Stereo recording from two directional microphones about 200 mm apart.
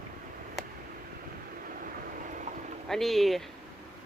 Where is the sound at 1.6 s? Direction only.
45° right (ahead or behind).